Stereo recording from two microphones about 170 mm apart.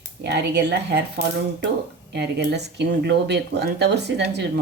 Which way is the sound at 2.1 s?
85° right.